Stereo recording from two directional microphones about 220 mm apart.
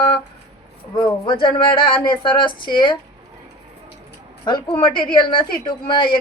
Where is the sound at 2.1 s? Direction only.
20° left (ahead or behind).